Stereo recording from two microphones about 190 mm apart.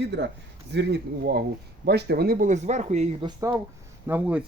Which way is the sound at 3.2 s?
15° right (ahead or behind).